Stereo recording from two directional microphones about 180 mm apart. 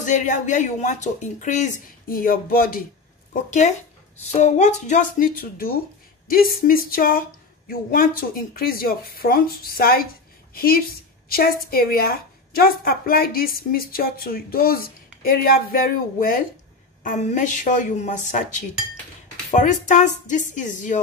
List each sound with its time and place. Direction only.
0.0 s a woman's voice: 45° left (ahead or behind)
3.4 s a woman's voice: 40° left (ahead or behind)